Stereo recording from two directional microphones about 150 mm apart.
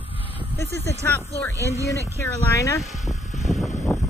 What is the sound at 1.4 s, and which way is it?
Speech, 20° left (ahead or behind).